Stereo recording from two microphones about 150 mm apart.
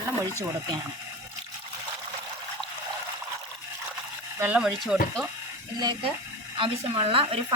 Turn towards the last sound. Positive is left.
turn(degrees=-40)  # may be behind; listen again after turning